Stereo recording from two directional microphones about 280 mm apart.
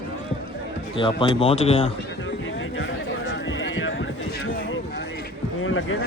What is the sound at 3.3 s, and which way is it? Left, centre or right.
Clip-clop, left.